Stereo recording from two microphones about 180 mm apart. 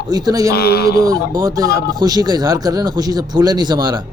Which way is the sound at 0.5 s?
60° left (ahead or behind).